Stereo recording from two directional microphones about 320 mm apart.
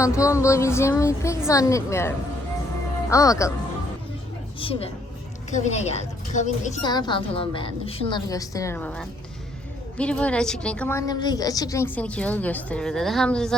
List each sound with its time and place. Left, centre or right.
0.0 s a woman's voice: centre
4.6 s a woman's voice: centre